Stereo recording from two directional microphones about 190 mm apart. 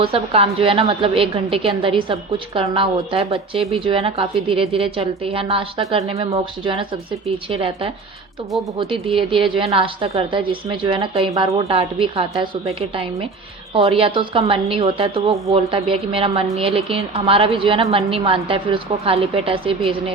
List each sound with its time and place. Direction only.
0.0 s a woman's voice: 30° right (ahead or behind)
8.9 s a woman's voice: 30° right (ahead or behind)
13.7 s a woman's voice: 30° right (ahead or behind)